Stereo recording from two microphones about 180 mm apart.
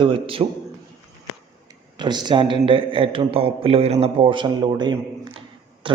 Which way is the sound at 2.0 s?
25° right (ahead or behind).